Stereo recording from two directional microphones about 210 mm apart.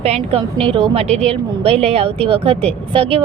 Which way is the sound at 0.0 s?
30° right (ahead or behind).